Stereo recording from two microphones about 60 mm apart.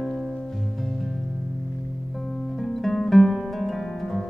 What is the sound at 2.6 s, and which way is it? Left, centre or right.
Music, centre.